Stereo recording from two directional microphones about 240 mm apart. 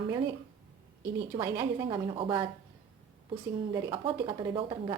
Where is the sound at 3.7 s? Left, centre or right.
Centre.